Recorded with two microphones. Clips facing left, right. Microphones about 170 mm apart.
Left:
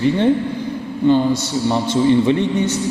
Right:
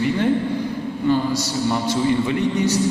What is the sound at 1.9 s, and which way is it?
Speech, 25° left (ahead or behind).